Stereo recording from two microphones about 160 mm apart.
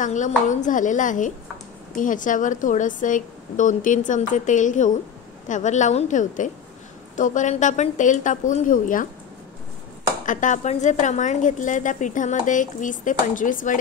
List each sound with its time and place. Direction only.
0.0 s a woman's voice: 50° left (ahead or behind)
10.2 s a woman's voice: 50° left (ahead or behind)